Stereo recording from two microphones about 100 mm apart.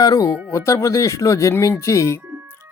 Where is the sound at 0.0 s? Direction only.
40° left (ahead or behind).